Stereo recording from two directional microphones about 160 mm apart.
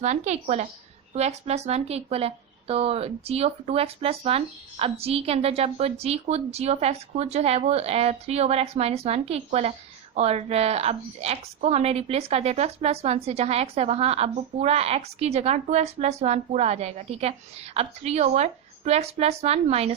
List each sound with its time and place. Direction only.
0.0 s a woman's voice: 45° right (ahead or behind)